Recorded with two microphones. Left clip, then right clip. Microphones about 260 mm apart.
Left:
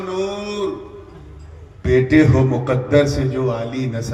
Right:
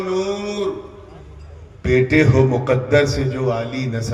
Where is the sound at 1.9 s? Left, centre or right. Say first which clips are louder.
Left 1 dB; right.